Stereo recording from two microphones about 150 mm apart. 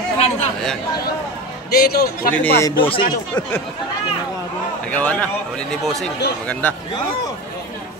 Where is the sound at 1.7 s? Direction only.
90° left.